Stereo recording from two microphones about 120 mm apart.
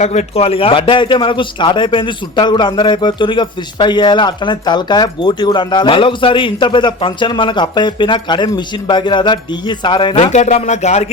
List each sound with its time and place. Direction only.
0.0 s a man's voice: 70° left (ahead or behind); by 10.3 s 45° left (ahead or behind)
10.3 s speech: 70° left (ahead or behind)